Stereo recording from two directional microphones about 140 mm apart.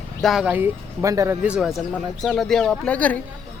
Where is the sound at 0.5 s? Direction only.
20° right (ahead or behind).